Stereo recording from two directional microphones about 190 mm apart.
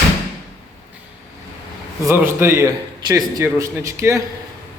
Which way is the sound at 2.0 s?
15° right (ahead or behind).